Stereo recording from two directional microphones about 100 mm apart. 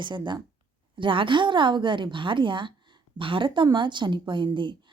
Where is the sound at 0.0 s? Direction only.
50° right (ahead or behind).